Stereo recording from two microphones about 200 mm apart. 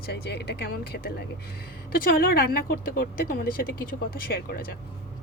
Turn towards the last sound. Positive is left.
turn(degrees=50)  # may be behind; listen again after turning